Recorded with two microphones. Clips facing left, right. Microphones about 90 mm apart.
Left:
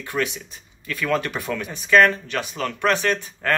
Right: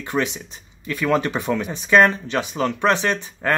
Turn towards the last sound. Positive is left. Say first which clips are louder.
# right 1 dB
turn(degrees=-20)  # may be behind; listen again after turning